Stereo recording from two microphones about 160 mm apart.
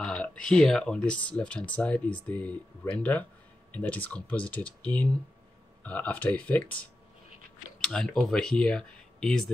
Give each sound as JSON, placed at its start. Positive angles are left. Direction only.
{"t": 0.0, "sound": "speech", "side_deg": 5}